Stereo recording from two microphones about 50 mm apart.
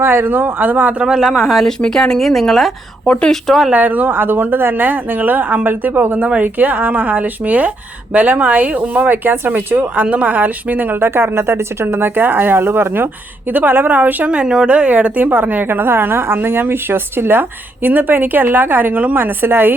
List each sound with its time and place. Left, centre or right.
0.0 s a woman's voice: right
0.6 s speech: right
0.9 s speech: centre
1.6 s speech: centre
3.1 s speech: left
3.4 s speech: centre
3.7 s speech: right
11.0 s a woman's voice: right
14.3 s a woman's voice: centre; by 19.7 s right